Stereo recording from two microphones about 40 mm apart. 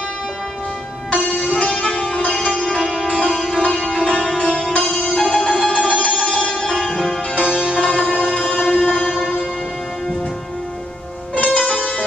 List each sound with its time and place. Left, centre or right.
1.1 s music: left
1.9 s sitar: left
2.8 s music: centre
3.1 s sitar: left
5.9 s music: left
6.6 s music: centre
7.3 s sitar: left
8.4 s train: left
8.6 s music: centre
11.3 s music: left